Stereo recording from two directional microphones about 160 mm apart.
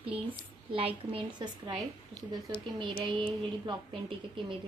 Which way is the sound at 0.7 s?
35° right (ahead or behind).